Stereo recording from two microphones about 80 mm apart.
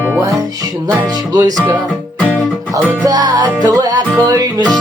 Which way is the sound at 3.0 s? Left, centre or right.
Right.